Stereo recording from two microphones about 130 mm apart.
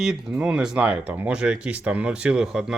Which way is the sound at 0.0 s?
5° right (ahead or behind).